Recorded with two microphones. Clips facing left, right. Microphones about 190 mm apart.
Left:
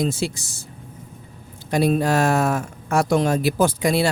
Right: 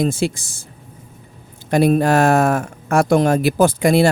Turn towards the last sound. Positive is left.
turn(degrees=-50)  # may be behind; listen again after turning